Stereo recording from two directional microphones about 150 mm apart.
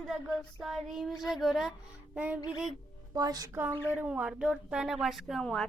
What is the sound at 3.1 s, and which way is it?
Speech, 25° right (ahead or behind).